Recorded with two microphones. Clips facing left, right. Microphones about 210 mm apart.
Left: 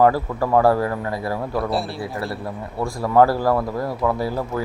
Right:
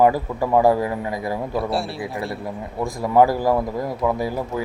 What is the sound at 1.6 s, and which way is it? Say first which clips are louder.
Speech: left 1 dB; centre (ahead or behind).